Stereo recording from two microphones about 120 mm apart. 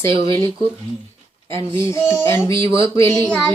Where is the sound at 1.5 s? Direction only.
25° left (ahead or behind).